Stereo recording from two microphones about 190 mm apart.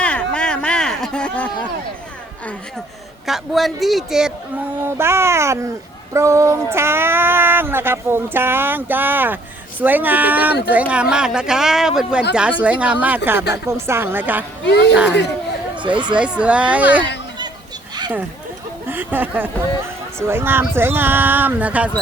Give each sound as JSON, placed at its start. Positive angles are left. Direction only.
{"t": 0.0, "sound": "a sound", "side_deg": 5}
{"t": 3.2, "sound": "speech", "side_deg": 0}
{"t": 4.8, "sound": "speech", "side_deg": -15}
{"t": 14.6, "sound": "speech", "side_deg": 60}
{"t": 16.1, "sound": "speech", "side_deg": -5}
{"t": 18.9, "sound": "speech", "side_deg": -10}